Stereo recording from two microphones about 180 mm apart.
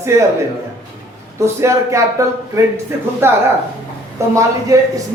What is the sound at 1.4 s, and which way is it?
A man's voice, 15° right (ahead or behind).